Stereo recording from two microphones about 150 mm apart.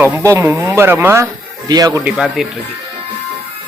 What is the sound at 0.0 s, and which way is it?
Speech, 15° right (ahead or behind).